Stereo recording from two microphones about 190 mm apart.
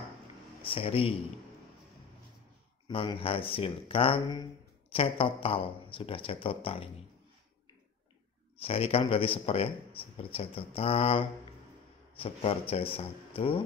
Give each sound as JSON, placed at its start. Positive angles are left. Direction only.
{"t": 0.6, "sound": "a man's voice", "side_deg": 30}
{"t": 2.9, "sound": "speech", "side_deg": 30}
{"t": 8.5, "sound": "a man's voice", "side_deg": 30}